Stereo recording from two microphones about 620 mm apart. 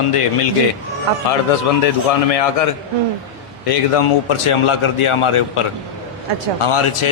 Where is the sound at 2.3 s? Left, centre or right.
Left.